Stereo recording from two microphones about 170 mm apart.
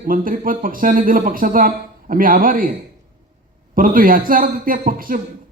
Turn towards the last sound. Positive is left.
turn(degrees=-55)  # may be behind; listen again after turning